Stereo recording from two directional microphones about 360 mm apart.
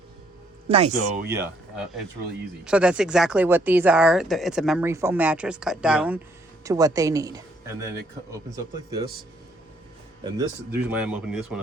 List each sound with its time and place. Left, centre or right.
0.7 s speech: centre
1.3 s speech: centre
10.2 s speech: centre